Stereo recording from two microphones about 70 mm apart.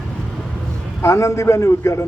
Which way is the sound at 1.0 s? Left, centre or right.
Left.